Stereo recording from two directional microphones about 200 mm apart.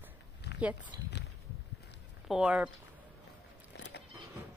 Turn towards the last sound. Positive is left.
turn(degrees=55)  # may be behind; listen again after turning